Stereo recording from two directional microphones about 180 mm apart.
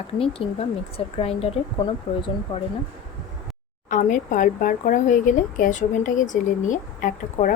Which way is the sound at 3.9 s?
45° left (ahead or behind).